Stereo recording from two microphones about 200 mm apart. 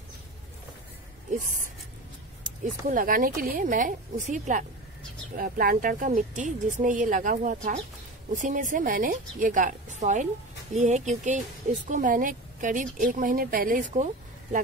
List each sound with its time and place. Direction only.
1.4 s speech: 40° right (ahead or behind)
2.9 s a woman's voice: 45° right (ahead or behind)